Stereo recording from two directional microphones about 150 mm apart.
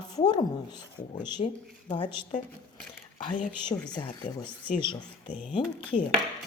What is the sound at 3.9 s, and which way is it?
Speech, 30° left (ahead or behind).